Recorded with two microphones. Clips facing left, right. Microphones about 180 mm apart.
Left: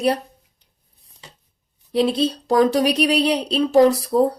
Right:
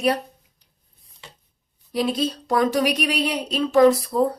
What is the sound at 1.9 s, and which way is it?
Speech, 25° left (ahead or behind).